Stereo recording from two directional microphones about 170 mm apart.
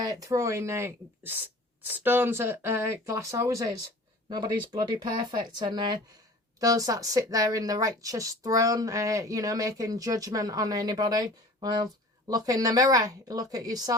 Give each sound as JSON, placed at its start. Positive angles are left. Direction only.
{"t": 0.0, "sound": "speech", "side_deg": -20}